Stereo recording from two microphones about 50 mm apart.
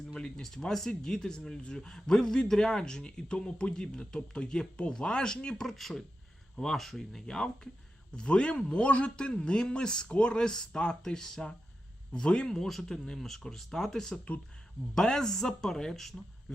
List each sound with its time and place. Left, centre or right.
0.1 s speech: centre
5.6 s speech: centre